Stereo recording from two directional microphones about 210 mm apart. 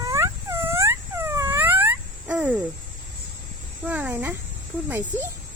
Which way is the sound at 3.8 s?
5° right (ahead or behind).